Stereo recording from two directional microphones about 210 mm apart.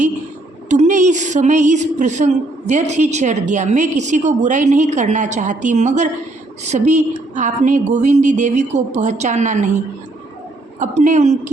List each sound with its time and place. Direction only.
0.7 s a woman's voice: 35° right (ahead or behind)
10.8 s a woman's voice: 35° right (ahead or behind)